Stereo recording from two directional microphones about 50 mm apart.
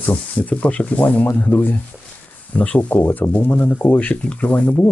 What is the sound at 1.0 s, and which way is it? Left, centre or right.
Speech, left.